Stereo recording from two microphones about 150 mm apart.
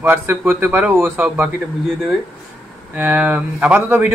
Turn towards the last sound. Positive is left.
turn(degrees=-10)  # may be behind; listen again after turning